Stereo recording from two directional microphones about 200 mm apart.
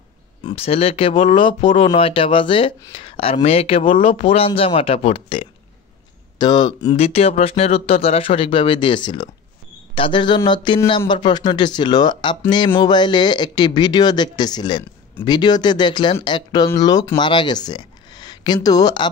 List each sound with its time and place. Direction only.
0.4 s speech: 25° left (ahead or behind)